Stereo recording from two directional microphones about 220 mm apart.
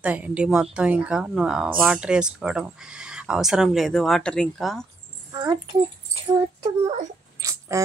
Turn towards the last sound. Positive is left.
turn(degrees=-15)  # may be behind; listen again after turning